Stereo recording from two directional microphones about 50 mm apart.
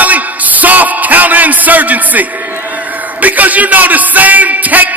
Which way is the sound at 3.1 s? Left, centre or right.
Right.